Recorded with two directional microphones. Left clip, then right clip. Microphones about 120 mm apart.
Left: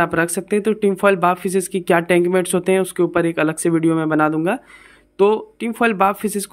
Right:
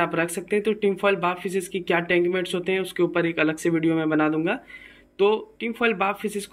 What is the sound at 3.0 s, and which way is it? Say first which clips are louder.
Speech: left 5 dB; 40° left (ahead or behind).